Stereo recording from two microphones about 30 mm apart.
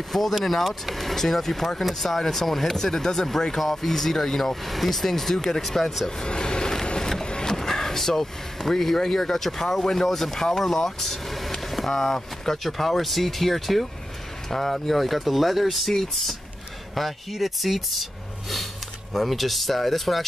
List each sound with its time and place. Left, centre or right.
0.4 s speech: centre
5.6 s speech: centre
6.2 s speech: left
7.0 s wood: centre
7.2 s a sound: left
7.5 s speech: centre
11.6 s vehicle: centre
11.9 s speech: centre
19.1 s speech: centre